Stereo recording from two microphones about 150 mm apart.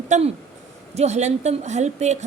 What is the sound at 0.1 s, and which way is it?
A woman's voice, 50° right (ahead or behind).